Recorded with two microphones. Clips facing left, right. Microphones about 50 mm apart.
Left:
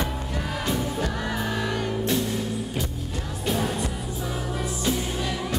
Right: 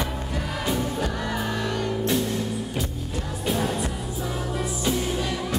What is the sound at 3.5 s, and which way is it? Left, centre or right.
Music, centre.